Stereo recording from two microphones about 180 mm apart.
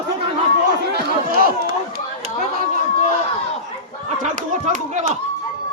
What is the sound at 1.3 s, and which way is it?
Speech, 55° right (ahead or behind).